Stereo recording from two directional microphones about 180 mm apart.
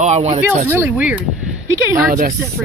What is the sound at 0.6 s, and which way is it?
Speech, 10° right (ahead or behind).